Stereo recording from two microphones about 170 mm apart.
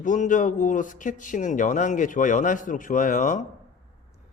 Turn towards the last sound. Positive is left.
turn(degrees=50)  # may be behind; listen again after turning